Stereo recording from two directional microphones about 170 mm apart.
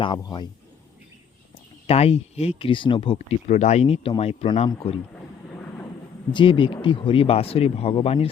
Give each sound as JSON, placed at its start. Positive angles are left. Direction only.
{"t": 0.0, "sound": "speech", "side_deg": 25}
{"t": 1.9, "sound": "speech", "side_deg": 35}
{"t": 6.3, "sound": "speech", "side_deg": 30}